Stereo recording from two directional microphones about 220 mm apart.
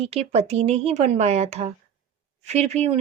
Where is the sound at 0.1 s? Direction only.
30° right (ahead or behind).